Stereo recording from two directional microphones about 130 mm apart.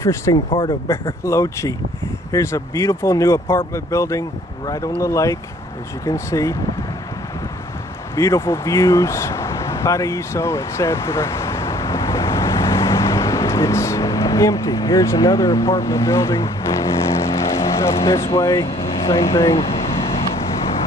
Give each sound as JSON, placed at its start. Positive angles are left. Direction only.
{"t": 0.0, "sound": "speech", "side_deg": 20}
{"t": 0.3, "sound": "speech", "side_deg": 40}
{"t": 0.8, "sound": "speech", "side_deg": 20}
{"t": 8.2, "sound": "vehicle", "side_deg": 20}
{"t": 18.4, "sound": "speech", "side_deg": 25}
{"t": 18.8, "sound": "vehicle", "side_deg": 50}
{"t": 19.5, "sound": "speech", "side_deg": 50}
{"t": 20.0, "sound": "vehicle", "side_deg": 50}